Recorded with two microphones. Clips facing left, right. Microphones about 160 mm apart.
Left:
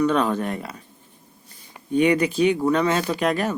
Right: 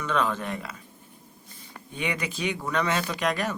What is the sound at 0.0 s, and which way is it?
Speech, 35° left (ahead or behind).